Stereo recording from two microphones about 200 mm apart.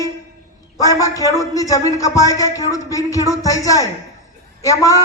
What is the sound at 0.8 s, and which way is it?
Music, 15° left (ahead or behind).